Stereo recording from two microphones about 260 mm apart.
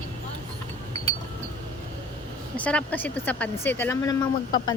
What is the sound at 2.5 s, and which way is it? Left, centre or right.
Speech, centre.